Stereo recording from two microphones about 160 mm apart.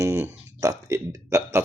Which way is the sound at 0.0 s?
15° right (ahead or behind).